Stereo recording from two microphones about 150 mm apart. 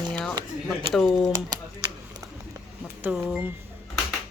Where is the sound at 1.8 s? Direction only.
20° right (ahead or behind).